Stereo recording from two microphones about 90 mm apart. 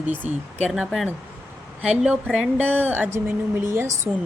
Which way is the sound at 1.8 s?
15° right (ahead or behind).